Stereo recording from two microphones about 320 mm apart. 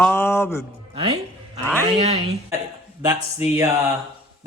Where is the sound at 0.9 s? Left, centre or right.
Centre.